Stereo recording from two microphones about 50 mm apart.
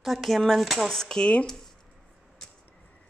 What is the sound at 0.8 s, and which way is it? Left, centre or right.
Speech, centre.